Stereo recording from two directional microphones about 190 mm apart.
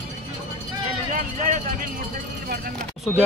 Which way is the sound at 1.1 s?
40° right (ahead or behind).